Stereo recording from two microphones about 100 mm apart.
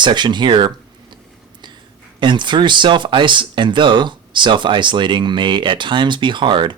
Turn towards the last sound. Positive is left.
turn(degrees=-55)  # may be behind; listen again after turning